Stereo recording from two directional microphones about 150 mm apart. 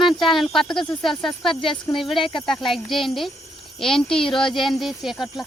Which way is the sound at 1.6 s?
35° left (ahead or behind).